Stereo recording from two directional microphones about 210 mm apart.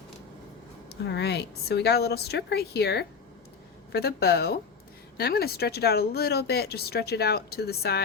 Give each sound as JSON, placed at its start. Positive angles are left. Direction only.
{"t": 0.9, "sound": "speech", "side_deg": 50}